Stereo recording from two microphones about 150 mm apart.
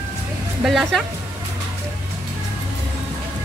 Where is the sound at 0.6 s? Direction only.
Centre (ahead or behind).